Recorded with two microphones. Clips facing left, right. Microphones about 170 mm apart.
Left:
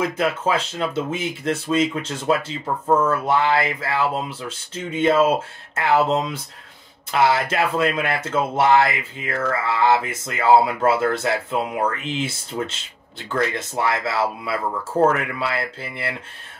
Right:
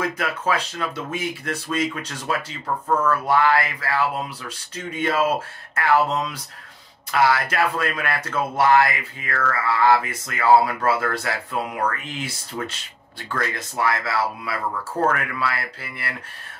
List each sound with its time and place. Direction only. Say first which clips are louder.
0.0 s speech: left 4 dB; 25° left (ahead or behind)